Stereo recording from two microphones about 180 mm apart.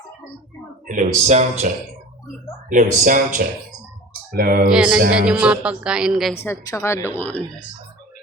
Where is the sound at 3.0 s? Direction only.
50° right (ahead or behind).